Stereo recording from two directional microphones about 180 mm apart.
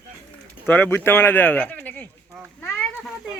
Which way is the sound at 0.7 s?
10° left (ahead or behind).